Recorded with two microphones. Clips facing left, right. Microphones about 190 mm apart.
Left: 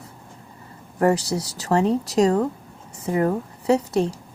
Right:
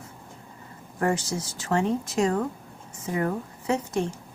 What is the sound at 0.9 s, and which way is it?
A woman's voice, 35° left (ahead or behind).